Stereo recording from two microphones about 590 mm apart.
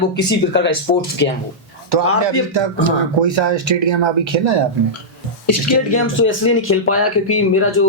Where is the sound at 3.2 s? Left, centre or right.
Right.